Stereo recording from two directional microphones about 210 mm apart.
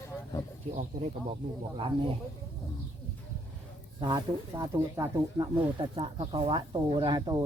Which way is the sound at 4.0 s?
20° right (ahead or behind).